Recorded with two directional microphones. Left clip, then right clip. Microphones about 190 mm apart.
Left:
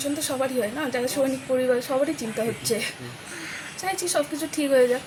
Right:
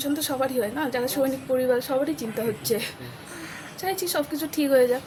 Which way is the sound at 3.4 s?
75° right (ahead or behind).